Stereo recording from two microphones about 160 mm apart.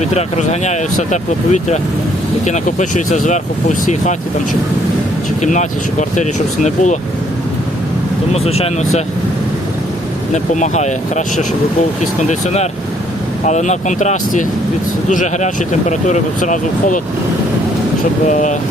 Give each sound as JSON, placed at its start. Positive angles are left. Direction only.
{"t": 0.0, "sound": "speech", "side_deg": 45}
{"t": 5.4, "sound": "speech", "side_deg": 50}
{"t": 8.3, "sound": "speech", "side_deg": 40}
{"t": 10.3, "sound": "speech", "side_deg": 50}
{"t": 13.4, "sound": "speech", "side_deg": 50}
{"t": 18.3, "sound": "speech", "side_deg": 50}